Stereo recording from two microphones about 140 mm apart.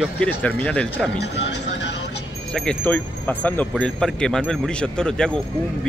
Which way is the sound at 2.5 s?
10° left (ahead or behind).